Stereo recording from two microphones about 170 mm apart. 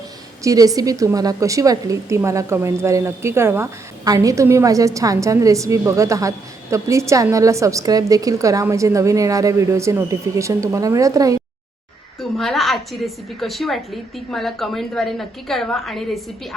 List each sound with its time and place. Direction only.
0.4 s a woman's voice: 20° right (ahead or behind)
12.2 s a woman's voice: centre (ahead or behind)